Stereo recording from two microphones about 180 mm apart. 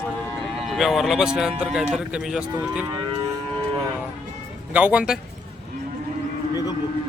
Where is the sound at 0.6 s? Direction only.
Centre (ahead or behind).